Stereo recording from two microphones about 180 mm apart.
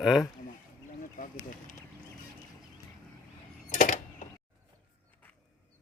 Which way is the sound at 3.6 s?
45° left (ahead or behind).